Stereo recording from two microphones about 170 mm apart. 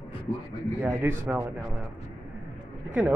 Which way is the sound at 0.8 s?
15° right (ahead or behind).